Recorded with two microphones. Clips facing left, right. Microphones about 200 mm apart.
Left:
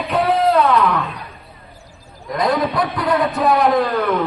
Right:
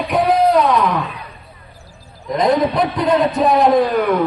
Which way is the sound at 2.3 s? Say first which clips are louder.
Right 3 dB; 20° right (ahead or behind).